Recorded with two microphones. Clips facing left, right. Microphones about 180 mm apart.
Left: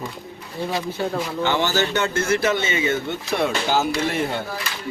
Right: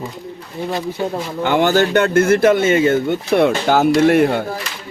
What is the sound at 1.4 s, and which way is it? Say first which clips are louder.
Speech: right 8 dB; 55° right (ahead or behind).